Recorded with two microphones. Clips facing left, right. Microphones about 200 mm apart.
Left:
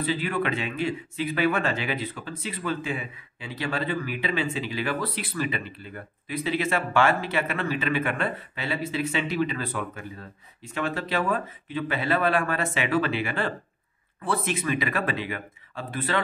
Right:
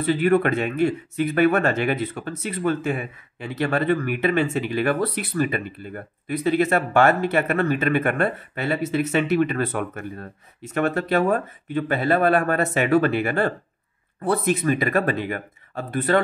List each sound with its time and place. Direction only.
0.0 s a man's voice: 50° right (ahead or behind)